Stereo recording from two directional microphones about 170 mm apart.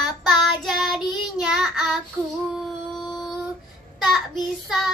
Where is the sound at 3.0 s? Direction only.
Centre (ahead or behind).